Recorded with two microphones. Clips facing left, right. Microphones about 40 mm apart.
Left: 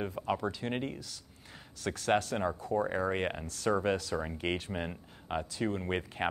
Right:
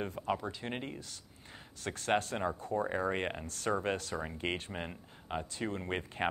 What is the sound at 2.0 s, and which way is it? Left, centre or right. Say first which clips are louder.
Speech: left 2 dB; centre.